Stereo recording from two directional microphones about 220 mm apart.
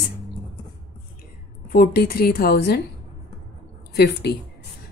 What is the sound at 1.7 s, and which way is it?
A woman's voice, 40° left (ahead or behind).